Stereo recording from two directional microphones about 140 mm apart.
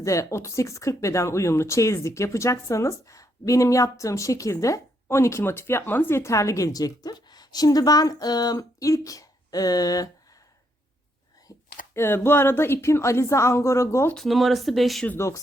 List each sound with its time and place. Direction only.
0.0 s speech: 20° left (ahead or behind)
11.5 s a sound: 30° left (ahead or behind)
11.9 s speech: 15° left (ahead or behind)
14.2 s speech: centre (ahead or behind)
15.0 s speech: 15° left (ahead or behind)